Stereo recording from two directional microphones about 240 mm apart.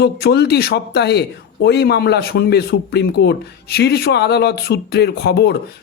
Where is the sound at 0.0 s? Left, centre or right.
Left.